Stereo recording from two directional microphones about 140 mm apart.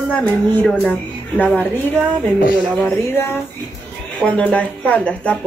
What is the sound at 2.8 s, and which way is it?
Speech, 15° left (ahead or behind).